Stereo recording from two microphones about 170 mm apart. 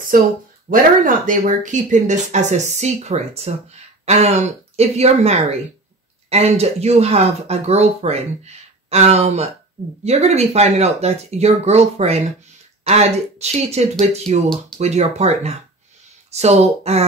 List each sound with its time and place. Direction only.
0.1 s speech: 55° right (ahead or behind); by 17.0 s 40° right (ahead or behind)